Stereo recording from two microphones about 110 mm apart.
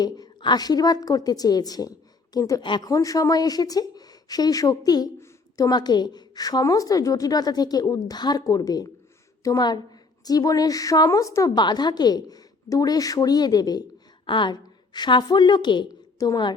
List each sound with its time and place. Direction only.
0.0 s a woman's voice: 40° left (ahead or behind)
2.6 s speech: 45° left (ahead or behind)
2.9 s a woman's voice: 30° left (ahead or behind)